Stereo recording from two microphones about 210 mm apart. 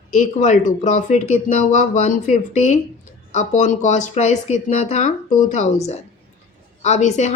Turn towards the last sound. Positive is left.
turn(degrees=35)  # may be behind; listen again after turning